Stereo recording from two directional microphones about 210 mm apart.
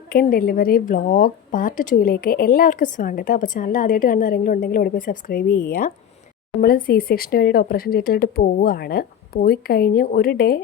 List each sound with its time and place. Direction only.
0.1 s a woman's voice: 45° left (ahead or behind)